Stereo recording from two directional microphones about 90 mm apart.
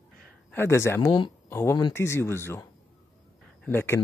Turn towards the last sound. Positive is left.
turn(degrees=25)  # may be behind; listen again after turning